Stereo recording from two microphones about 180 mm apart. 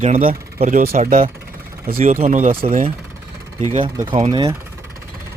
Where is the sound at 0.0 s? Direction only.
40° right (ahead or behind).